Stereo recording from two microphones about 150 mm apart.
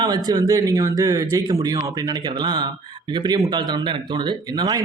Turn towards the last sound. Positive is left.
turn(degrees=-25)  # may be behind; listen again after turning